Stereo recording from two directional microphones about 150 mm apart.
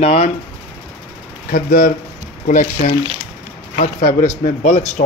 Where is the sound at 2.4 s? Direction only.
60° left (ahead or behind).